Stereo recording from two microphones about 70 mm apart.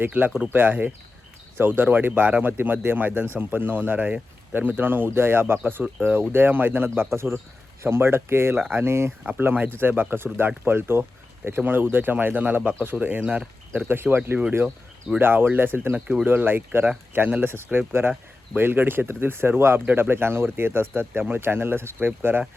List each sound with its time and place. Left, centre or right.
0.0 s speech: right
9.2 s speech: right
15.2 s speech: right